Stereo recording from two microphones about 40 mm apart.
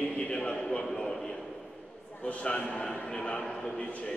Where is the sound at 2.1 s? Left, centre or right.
Left.